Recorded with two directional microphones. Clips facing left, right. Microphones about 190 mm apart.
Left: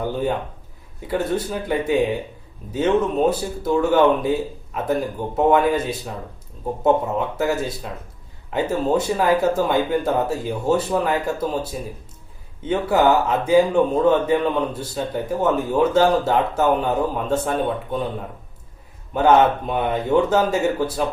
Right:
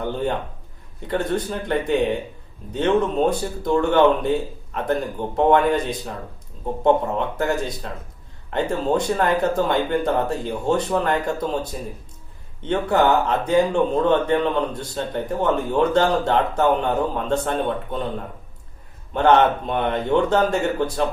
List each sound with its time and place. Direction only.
0.0 s speech: 5° left (ahead or behind)
19.1 s speech: 5° left (ahead or behind)